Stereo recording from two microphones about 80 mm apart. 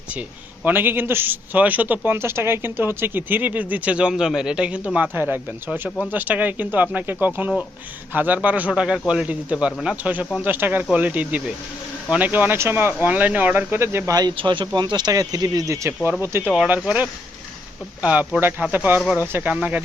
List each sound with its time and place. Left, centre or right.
0.2 s a man's voice: right
5.1 s a man's voice: right
14.1 s speech: right
14.3 s speech: right
15.1 s speech: right
16.5 s a man's voice: centre